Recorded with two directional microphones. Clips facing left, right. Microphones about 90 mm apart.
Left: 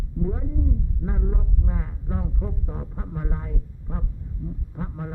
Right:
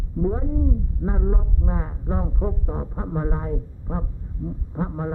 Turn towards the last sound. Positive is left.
turn(degrees=-30)  # may be behind; listen again after turning